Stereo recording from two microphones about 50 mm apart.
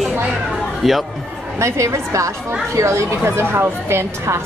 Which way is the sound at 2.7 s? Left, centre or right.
Right.